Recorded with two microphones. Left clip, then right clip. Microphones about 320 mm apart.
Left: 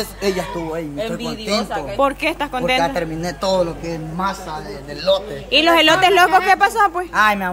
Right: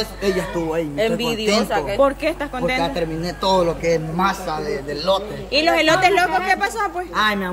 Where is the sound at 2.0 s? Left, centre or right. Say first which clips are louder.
Left 3 dB; centre.